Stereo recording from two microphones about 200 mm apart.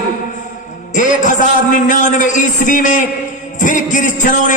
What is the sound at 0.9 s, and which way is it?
A man's voice, 40° left (ahead or behind).